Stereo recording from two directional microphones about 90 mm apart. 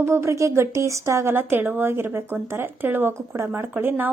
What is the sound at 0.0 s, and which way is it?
Speech, 30° right (ahead or behind).